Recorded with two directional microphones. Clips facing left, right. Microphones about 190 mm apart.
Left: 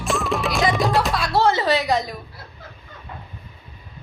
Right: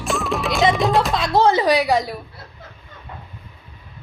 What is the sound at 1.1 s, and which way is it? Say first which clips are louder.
Music: right 3 dB; 20° right (ahead or behind).